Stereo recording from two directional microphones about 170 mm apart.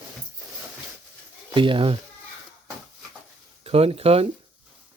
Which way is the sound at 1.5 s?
30° right (ahead or behind).